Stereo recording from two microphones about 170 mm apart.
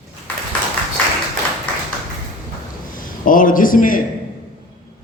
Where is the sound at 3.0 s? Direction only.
55° left (ahead or behind).